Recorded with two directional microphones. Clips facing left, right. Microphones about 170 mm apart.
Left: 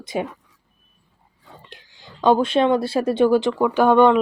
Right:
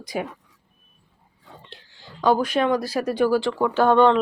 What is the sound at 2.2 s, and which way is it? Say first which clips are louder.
Speech: left 3 dB; 25° left (ahead or behind).